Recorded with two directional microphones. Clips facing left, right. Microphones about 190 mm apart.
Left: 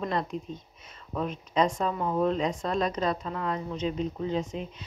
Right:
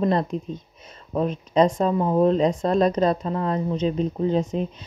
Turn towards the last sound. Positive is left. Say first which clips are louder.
# right 8 dB
turn(degrees=-40)  # may be behind; listen again after turning